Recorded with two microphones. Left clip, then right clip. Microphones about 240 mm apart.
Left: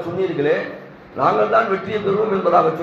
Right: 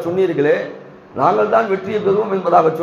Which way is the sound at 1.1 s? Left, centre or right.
Right.